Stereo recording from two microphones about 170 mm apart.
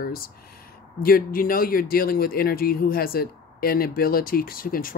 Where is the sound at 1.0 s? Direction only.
60° left (ahead or behind).